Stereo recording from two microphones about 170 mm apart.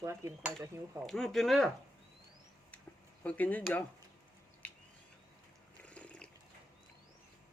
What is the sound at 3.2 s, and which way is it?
Speech, 10° left (ahead or behind).